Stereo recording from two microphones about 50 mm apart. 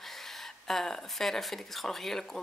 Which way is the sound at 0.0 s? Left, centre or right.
Centre.